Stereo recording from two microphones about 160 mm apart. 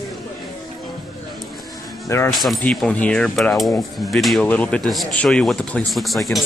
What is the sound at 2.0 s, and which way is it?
Speech, 15° left (ahead or behind).